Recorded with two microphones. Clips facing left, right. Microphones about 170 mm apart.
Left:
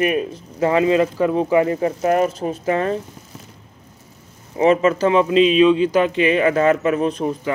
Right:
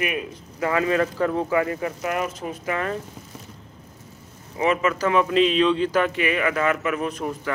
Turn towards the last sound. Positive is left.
turn(degrees=20)  # may be behind; listen again after turning